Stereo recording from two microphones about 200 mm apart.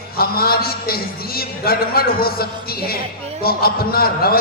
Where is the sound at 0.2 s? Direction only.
50° left (ahead or behind).